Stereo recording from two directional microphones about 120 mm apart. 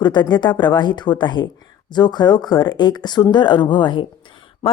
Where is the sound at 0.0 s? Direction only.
40° left (ahead or behind).